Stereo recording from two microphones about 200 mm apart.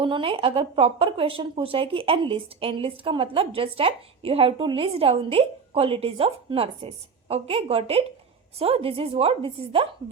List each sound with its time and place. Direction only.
0.0 s a woman's voice: 25° right (ahead or behind)